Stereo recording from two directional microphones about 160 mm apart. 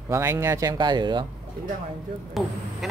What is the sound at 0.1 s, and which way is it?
Speech, 15° right (ahead or behind).